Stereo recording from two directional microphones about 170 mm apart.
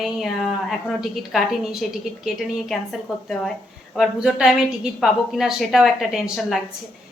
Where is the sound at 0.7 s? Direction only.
Centre (ahead or behind).